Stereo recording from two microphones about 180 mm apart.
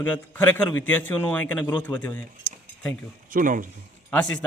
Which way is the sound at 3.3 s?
45° right (ahead or behind).